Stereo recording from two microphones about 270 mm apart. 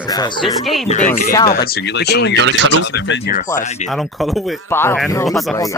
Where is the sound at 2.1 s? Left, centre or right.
Left.